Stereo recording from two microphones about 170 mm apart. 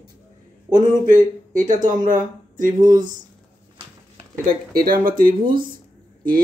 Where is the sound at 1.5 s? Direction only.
50° right (ahead or behind).